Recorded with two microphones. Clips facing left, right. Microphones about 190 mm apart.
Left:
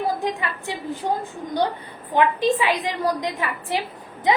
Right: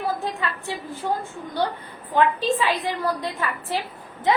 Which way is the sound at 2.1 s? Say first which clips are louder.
Left 1 dB; 15° left (ahead or behind).